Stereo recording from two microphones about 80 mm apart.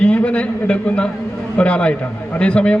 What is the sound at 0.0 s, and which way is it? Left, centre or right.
A man's voice, centre.